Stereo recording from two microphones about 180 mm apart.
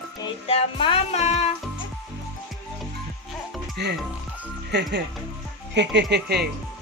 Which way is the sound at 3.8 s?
65° right (ahead or behind).